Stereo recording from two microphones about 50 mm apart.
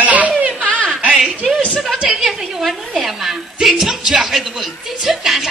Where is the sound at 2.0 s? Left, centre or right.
Centre.